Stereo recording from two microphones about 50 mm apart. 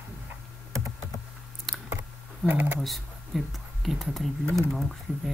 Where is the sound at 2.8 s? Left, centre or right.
Centre.